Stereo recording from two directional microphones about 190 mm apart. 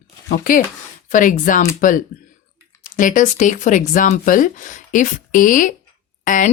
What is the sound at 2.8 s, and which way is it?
A woman's voice, 45° left (ahead or behind).